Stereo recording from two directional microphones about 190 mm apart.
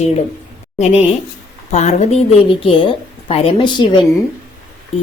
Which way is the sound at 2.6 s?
30° left (ahead or behind).